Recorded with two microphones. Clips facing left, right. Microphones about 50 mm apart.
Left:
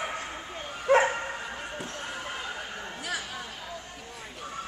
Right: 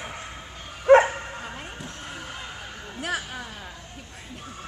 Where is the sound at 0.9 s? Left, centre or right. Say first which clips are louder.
Right 7 dB; right.